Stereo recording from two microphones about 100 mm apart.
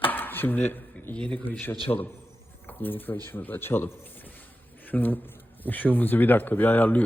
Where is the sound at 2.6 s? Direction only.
20° left (ahead or behind).